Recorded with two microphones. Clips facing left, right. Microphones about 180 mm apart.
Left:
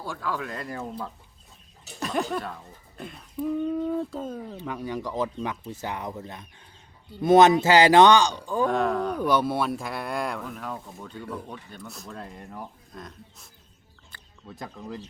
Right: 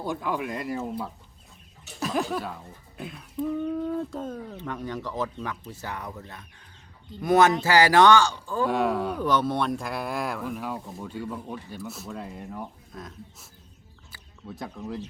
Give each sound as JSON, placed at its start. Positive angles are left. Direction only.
{"t": 0.0, "sound": "speech", "side_deg": -20}
{"t": 8.6, "sound": "speech", "side_deg": -5}
{"t": 9.1, "sound": "speech", "side_deg": 10}